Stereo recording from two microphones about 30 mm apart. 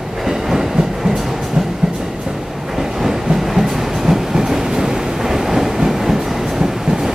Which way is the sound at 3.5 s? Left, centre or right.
Centre.